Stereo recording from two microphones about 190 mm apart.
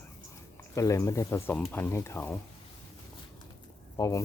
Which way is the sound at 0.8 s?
15° left (ahead or behind).